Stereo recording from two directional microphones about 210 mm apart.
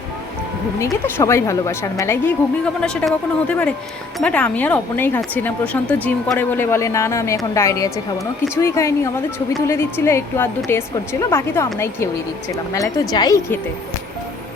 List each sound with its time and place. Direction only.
0.9 s a woman's voice: 10° left (ahead or behind)